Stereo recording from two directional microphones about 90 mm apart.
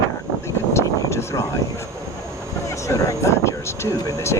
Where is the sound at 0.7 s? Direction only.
30° left (ahead or behind).